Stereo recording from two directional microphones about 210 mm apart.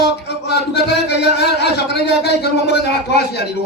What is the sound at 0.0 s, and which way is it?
Speech, 55° left (ahead or behind).